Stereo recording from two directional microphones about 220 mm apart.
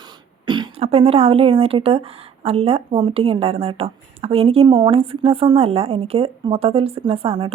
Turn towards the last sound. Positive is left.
turn(degrees=-25)  # may be behind; listen again after turning